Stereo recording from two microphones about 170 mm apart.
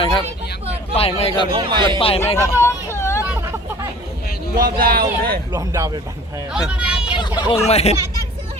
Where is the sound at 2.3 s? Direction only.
15° left (ahead or behind).